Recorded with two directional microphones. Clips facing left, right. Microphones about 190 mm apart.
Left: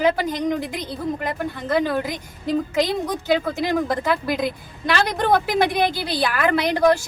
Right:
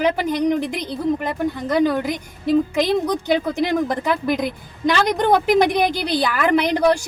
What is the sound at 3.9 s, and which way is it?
A woman's voice, 15° right (ahead or behind).